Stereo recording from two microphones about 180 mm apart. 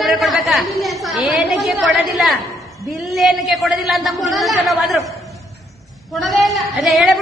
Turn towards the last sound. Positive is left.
turn(degrees=0)  # may be behind; listen again after turning